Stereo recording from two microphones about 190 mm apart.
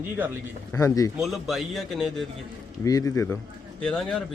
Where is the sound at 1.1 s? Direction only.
Centre (ahead or behind).